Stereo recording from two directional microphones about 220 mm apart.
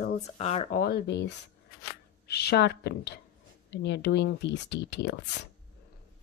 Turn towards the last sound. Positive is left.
turn(degrees=50)  # may be behind; listen again after turning